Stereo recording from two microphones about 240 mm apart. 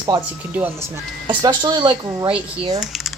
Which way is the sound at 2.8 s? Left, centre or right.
Centre.